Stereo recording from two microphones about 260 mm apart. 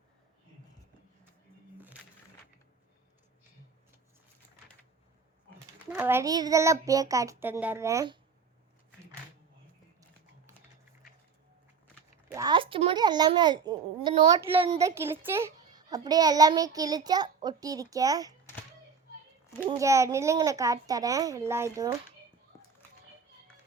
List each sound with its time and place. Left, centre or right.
5.9 s a child's voice: centre
12.3 s babbling: centre
14.6 s a child's voice: centre
19.6 s a child's voice: centre